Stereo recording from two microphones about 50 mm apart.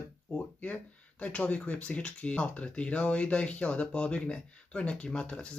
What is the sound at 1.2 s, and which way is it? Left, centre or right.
Speech, left.